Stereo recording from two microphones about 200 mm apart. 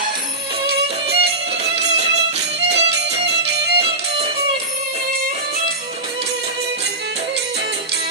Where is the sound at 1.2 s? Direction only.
55° right (ahead or behind).